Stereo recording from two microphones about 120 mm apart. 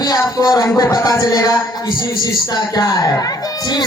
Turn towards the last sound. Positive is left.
turn(degrees=30)  # may be behind; listen again after turning